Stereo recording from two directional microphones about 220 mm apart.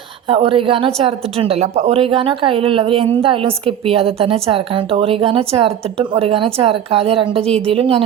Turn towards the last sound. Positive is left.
turn(degrees=-25)  # may be behind; listen again after turning